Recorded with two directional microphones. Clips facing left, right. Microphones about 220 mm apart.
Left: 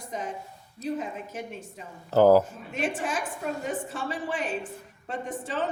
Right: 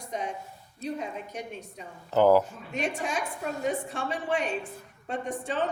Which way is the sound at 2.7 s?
5° left (ahead or behind).